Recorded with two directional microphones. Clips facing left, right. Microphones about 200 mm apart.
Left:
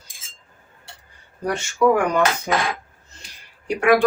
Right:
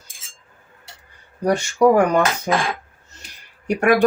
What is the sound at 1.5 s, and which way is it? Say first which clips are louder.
Speech: right 3 dB; 40° right (ahead or behind).